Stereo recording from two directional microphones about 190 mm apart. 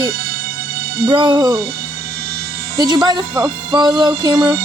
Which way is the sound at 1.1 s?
25° right (ahead or behind).